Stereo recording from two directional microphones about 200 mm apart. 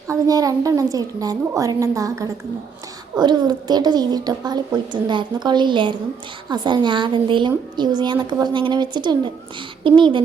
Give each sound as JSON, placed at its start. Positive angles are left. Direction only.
{"t": 0.1, "sound": "a woman's voice", "side_deg": -15}